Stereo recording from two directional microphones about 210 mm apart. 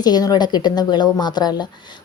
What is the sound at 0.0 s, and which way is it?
A woman's voice, 20° left (ahead or behind).